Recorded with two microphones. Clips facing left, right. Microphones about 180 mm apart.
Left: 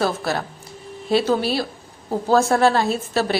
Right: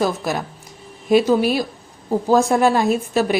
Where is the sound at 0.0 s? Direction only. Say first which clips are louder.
Right 1 dB; 15° right (ahead or behind).